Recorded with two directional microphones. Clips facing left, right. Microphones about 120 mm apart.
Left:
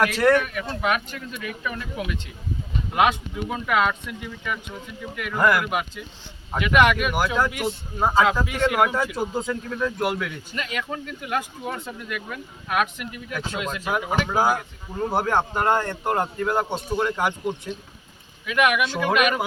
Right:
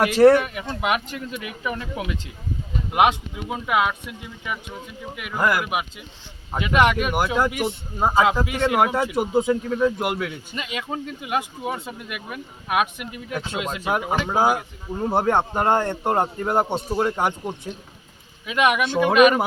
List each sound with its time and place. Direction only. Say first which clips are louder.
0.0 s a man's voice: right 5 dB; 30° right (ahead or behind)
6.6 s a man's voice: even; 25° right (ahead or behind)
18.4 s a man's voice: right 1 dB; 20° right (ahead or behind)